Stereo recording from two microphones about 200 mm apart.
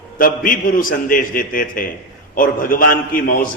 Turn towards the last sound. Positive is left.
turn(degrees=45)  # may be behind; listen again after turning